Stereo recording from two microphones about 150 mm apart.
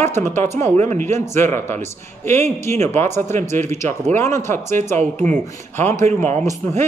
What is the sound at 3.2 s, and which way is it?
Speech, 55° right (ahead or behind).